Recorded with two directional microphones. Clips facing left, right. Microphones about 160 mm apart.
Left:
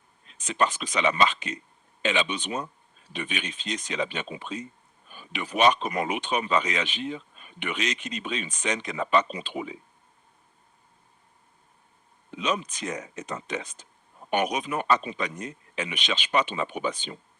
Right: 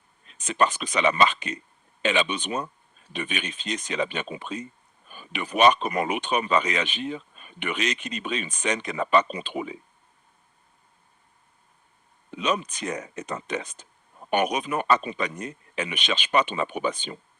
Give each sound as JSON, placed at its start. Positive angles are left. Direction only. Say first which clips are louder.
{"t": 0.3, "sound": "speech", "louder": "right 2 dB", "side_deg": -55}
{"t": 12.4, "sound": "speech", "louder": "right 2 dB", "side_deg": -55}